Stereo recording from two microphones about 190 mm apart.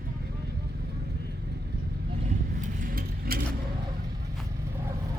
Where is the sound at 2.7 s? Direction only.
50° right (ahead or behind).